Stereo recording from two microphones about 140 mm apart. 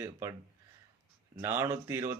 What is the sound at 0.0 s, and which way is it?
Speech, 20° right (ahead or behind).